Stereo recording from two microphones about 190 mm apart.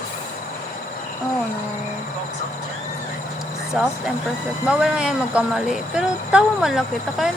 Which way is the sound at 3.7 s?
Centre (ahead or behind).